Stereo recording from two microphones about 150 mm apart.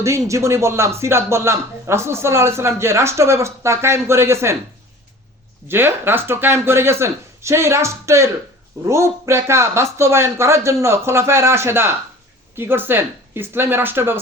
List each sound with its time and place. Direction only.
0.0 s speech: 20° right (ahead or behind)
5.6 s speech: 15° right (ahead or behind)